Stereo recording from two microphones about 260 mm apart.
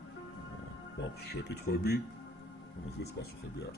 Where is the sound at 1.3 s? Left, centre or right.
Left.